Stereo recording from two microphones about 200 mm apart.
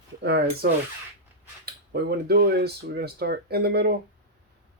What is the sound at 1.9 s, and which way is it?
Speech, 55° right (ahead or behind).